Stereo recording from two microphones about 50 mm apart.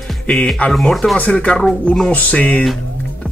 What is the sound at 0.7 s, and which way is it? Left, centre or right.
Speech, centre.